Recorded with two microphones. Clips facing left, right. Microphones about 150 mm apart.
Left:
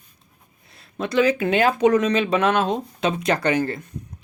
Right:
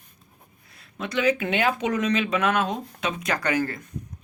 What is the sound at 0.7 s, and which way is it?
Speech, 30° left (ahead or behind).